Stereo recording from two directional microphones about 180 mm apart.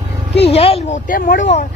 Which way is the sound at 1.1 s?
45° left (ahead or behind).